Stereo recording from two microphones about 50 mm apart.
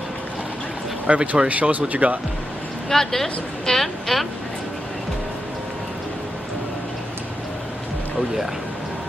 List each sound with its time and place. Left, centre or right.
1.0 s speech: right
2.9 s a woman's voice: centre